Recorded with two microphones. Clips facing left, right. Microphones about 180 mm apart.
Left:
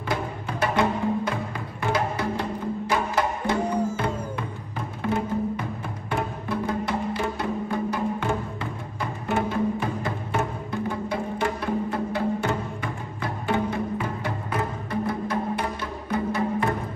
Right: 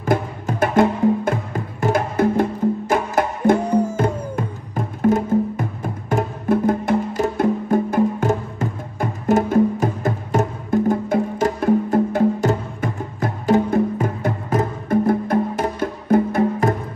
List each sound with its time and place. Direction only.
0.0 s music: 45° right (ahead or behind)